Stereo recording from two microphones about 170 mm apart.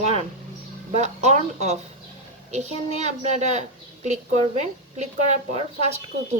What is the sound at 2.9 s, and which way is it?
A woman's voice, 40° right (ahead or behind).